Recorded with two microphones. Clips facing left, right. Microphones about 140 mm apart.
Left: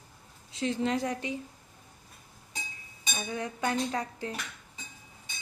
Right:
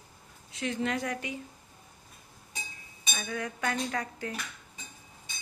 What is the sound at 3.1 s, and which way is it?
A woman's voice, 20° left (ahead or behind).